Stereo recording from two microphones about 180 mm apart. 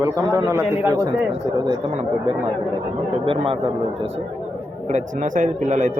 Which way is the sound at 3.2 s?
30° right (ahead or behind).